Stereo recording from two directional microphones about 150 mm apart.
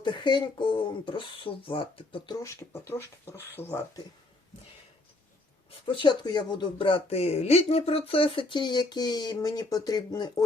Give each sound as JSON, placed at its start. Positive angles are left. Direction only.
{"t": 0.0, "sound": "speech", "side_deg": 30}
{"t": 5.8, "sound": "speech", "side_deg": 35}